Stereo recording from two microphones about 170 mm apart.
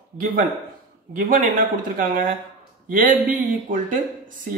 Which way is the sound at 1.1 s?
55° right (ahead or behind).